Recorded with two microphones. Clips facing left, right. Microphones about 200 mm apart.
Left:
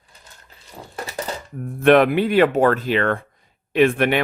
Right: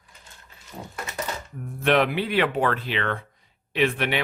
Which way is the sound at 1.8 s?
50° left (ahead or behind).